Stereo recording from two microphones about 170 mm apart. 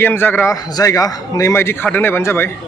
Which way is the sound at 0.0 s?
10° left (ahead or behind).